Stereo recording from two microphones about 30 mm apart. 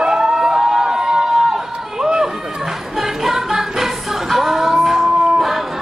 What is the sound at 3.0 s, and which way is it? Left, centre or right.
Music, centre.